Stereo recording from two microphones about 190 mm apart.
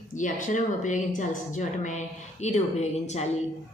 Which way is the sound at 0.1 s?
40° left (ahead or behind).